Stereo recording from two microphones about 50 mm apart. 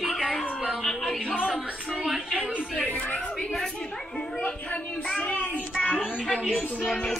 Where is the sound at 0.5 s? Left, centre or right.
Centre.